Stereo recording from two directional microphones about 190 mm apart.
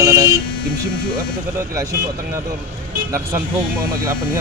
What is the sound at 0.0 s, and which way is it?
Buzzer, 15° right (ahead or behind).